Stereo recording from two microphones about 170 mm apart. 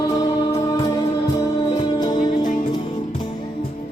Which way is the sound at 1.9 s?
25° left (ahead or behind).